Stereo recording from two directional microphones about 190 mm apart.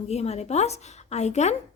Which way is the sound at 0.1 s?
35° left (ahead or behind).